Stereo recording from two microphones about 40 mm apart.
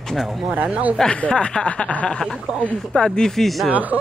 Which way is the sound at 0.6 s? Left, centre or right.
Right.